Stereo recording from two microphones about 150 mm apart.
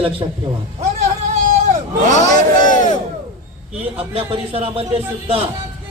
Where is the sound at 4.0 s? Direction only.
40° right (ahead or behind).